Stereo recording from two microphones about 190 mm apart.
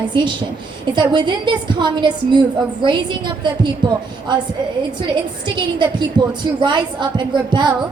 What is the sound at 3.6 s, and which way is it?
Speech, 25° right (ahead or behind).